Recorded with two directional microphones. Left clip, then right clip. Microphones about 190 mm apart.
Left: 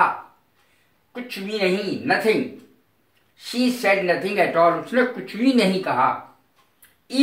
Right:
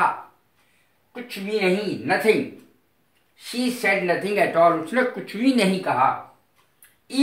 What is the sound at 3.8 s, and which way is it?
Speech, 20° right (ahead or behind).